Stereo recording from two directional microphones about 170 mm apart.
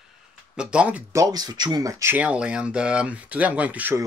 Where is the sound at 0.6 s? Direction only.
5° right (ahead or behind).